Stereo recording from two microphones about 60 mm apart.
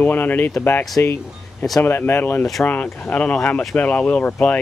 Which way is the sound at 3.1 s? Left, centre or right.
Left.